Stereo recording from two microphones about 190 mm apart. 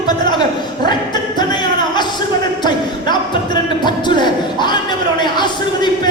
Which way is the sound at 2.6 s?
25° left (ahead or behind).